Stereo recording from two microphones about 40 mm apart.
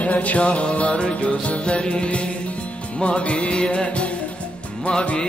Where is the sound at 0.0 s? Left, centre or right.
Left.